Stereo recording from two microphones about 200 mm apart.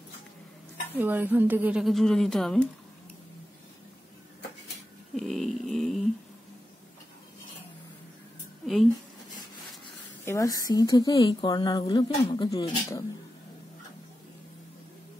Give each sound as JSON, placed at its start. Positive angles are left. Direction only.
{"t": 0.9, "sound": "speech", "side_deg": -10}
{"t": 5.1, "sound": "a sound", "side_deg": 0}
{"t": 10.2, "sound": "a woman's voice", "side_deg": 15}